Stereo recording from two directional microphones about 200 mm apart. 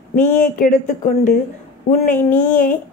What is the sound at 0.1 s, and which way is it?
A woman's voice, 40° left (ahead or behind).